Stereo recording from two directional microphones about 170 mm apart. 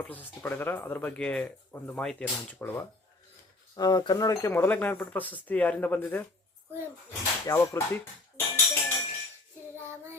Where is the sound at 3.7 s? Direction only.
25° left (ahead or behind).